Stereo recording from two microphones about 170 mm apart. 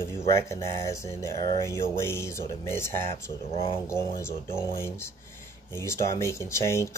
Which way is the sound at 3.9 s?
15° left (ahead or behind).